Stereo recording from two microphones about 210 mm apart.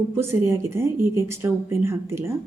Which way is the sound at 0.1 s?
10° right (ahead or behind).